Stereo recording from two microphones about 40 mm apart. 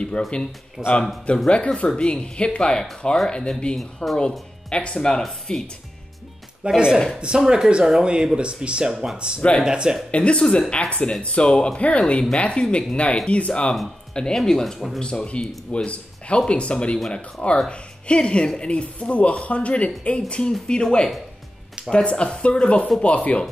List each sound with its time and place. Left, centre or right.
0.2 s speech: left
0.8 s speech: right
1.5 s speech: left
3.7 s speech: centre
4.6 s speech: left
6.6 s speech: right
10.1 s speech: left
14.1 s speech: centre
15.0 s speech: left